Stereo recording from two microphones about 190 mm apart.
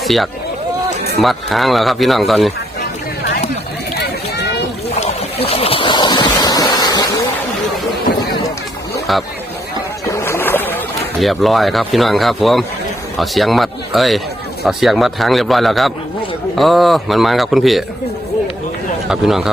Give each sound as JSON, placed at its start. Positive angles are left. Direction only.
{"t": 0.0, "sound": "speech", "side_deg": 0}
{"t": 4.0, "sound": "run", "side_deg": 60}
{"t": 4.9, "sound": "a sound", "side_deg": 30}
{"t": 10.1, "sound": "boat", "side_deg": 15}
{"t": 11.2, "sound": "speech", "side_deg": 0}
{"t": 19.0, "sound": "speech", "side_deg": 0}